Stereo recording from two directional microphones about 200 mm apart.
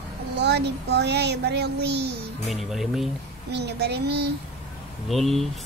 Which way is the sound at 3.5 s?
55° right (ahead or behind).